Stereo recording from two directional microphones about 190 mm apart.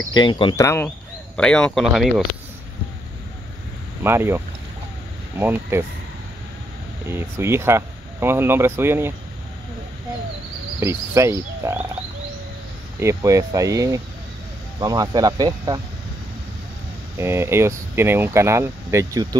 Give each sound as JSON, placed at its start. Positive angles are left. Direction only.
{"t": 0.1, "sound": "speech", "side_deg": 25}
{"t": 4.0, "sound": "speech", "side_deg": -10}
{"t": 5.4, "sound": "speech", "side_deg": -10}
{"t": 7.3, "sound": "speech", "side_deg": -15}
{"t": 10.8, "sound": "speech", "side_deg": -15}
{"t": 13.0, "sound": "speech", "side_deg": -15}
{"t": 17.2, "sound": "speech", "side_deg": -15}